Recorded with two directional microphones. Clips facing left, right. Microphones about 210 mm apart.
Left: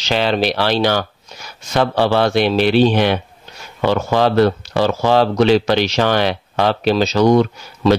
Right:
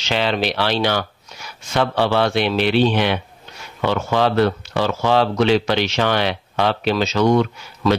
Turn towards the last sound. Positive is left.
turn(degrees=35)  # may be behind; listen again after turning